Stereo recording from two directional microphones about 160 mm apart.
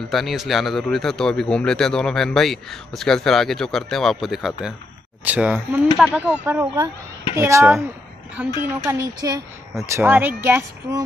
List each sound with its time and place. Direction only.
0.1 s speech: centre (ahead or behind)